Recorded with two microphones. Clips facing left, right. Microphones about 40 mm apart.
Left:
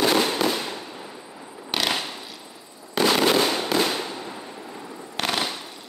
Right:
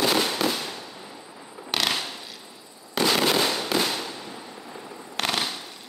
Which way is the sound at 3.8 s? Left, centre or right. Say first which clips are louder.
Left 3 dB; centre.